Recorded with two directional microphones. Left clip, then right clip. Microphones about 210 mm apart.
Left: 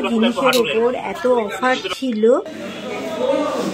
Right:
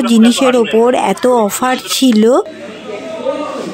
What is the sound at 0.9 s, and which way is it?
Speech, 55° right (ahead or behind).